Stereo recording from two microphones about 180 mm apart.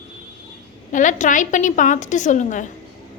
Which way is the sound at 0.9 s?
45° left (ahead or behind).